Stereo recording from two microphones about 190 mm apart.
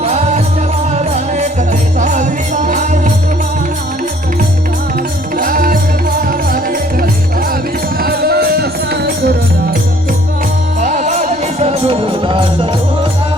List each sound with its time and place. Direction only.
0.0 s music: 35° right (ahead or behind)
5.4 s music: 45° right (ahead or behind)
8.0 s music: 55° right (ahead or behind)
10.8 s music: 40° right (ahead or behind)